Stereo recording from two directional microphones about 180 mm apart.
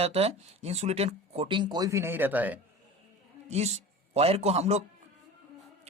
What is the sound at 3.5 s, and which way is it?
A man's voice, 40° right (ahead or behind).